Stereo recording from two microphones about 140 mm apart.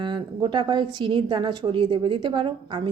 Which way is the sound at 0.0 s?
35° right (ahead or behind).